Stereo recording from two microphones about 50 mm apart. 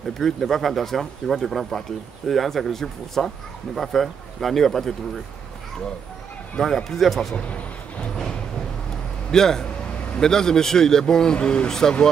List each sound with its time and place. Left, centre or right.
0.2 s speech: centre
6.6 s speech: centre
7.3 s a sound: left
9.3 s a man's voice: centre